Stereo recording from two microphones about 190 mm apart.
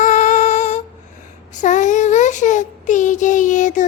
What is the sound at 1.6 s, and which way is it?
Child singing, 40° left (ahead or behind).